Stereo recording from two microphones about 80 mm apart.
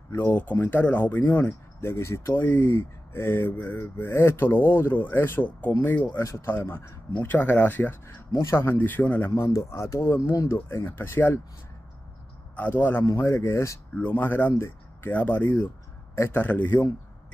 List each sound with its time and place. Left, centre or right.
0.1 s speech: left
2.4 s speech: left
7.2 s speech: left
8.1 s speech: left
9.4 s speech: left
12.5 s speech: left
13.2 s speech: left
13.9 s speech: left